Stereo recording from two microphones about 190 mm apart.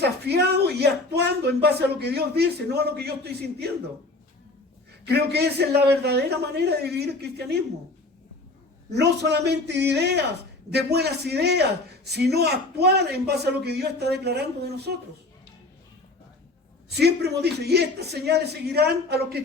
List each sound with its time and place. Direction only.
0.0 s speech: 60° right (ahead or behind)
5.0 s a man's voice: 60° right (ahead or behind)
8.9 s a man's voice: 60° right (ahead or behind)
16.9 s a man's voice: 60° right (ahead or behind)